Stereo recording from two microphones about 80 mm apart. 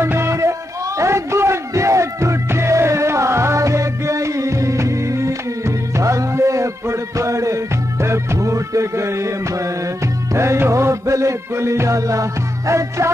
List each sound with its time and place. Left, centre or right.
0.0 s music: right